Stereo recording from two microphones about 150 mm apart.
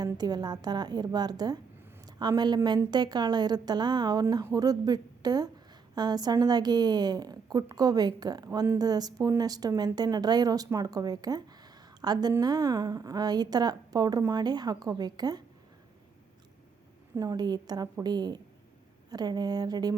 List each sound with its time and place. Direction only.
0.0 s a woman's voice: 25° right (ahead or behind)
17.2 s a woman's voice: 25° right (ahead or behind)